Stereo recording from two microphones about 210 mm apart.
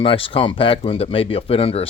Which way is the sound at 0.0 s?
25° left (ahead or behind).